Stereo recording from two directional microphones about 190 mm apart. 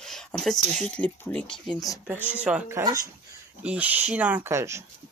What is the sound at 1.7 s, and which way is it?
Speech, 20° left (ahead or behind).